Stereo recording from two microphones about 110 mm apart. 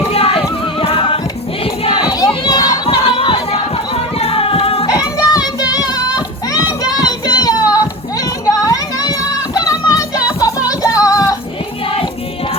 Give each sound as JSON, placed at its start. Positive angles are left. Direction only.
{"t": 0.1, "sound": "music", "side_deg": 65}
{"t": 1.9, "sound": "crowd", "side_deg": 40}
{"t": 2.8, "sound": "a sound", "side_deg": 55}
{"t": 4.9, "sound": "music", "side_deg": 30}
{"t": 9.6, "sound": "child singing", "side_deg": 30}
{"t": 10.4, "sound": "music", "side_deg": 30}